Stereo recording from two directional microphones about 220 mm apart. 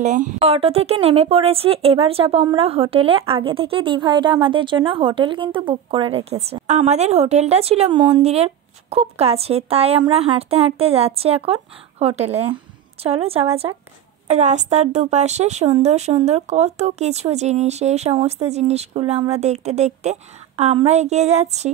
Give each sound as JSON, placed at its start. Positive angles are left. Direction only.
{"t": 0.0, "sound": "a woman's voice", "side_deg": -35}